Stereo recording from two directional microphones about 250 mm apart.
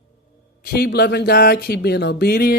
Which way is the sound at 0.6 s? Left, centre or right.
Left.